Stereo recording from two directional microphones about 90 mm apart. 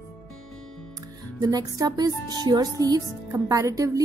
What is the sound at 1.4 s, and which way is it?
A woman's voice, 45° right (ahead or behind).